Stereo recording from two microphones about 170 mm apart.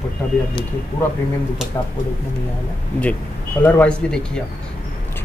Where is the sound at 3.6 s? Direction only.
5° left (ahead or behind).